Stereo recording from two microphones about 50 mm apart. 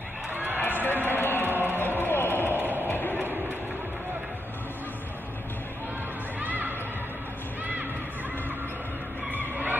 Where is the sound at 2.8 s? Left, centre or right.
Left.